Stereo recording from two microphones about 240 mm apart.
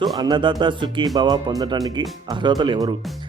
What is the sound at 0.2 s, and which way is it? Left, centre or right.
Speech, centre.